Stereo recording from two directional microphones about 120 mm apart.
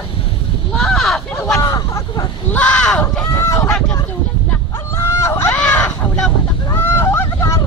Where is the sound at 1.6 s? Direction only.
30° left (ahead or behind).